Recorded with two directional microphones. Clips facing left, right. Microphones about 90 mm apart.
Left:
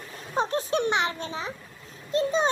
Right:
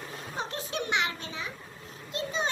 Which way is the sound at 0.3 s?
35° left (ahead or behind).